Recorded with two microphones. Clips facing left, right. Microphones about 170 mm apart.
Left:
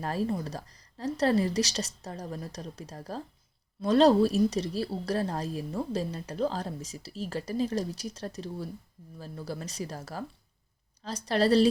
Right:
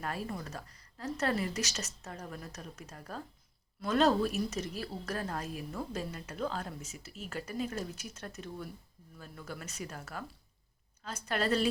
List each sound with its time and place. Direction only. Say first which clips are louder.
0.0 s a woman's voice: left 8 dB; 30° left (ahead or behind)